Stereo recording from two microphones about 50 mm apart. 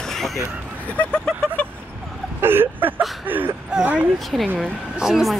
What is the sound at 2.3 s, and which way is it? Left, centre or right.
Vehicle, right.